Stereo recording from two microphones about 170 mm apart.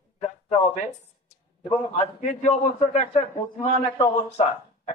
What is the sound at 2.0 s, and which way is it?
A man's voice, 45° left (ahead or behind).